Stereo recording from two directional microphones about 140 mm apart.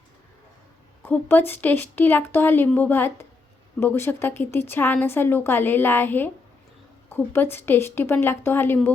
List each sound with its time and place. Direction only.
1.0 s a woman's voice: 15° left (ahead or behind)